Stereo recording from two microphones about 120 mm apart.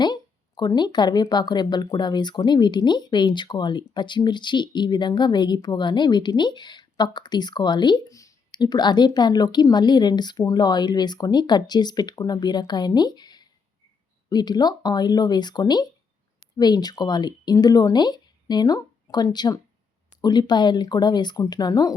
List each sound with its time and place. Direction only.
0.0 s speech: 35° left (ahead or behind)